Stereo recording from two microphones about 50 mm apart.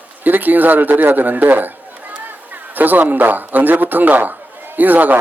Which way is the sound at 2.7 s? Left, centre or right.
Right.